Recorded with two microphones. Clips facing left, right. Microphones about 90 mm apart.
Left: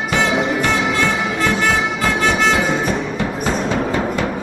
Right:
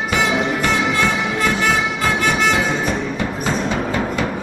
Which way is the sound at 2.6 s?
Centre (ahead or behind).